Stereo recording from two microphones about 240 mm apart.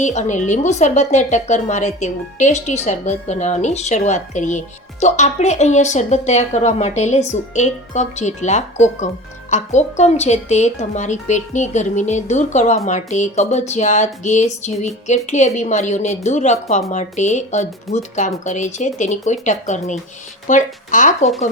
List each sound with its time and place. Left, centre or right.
0.0 s speech: left